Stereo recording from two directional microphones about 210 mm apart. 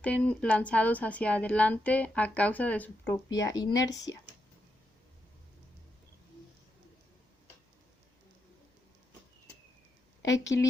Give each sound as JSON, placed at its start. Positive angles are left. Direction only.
{"t": 0.0, "sound": "a woman's voice", "side_deg": 5}
{"t": 3.2, "sound": "a woman's voice", "side_deg": 20}
{"t": 10.2, "sound": "a woman's voice", "side_deg": 15}